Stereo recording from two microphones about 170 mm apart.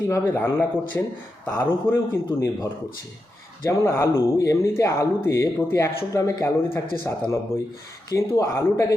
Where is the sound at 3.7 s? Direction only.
15° left (ahead or behind).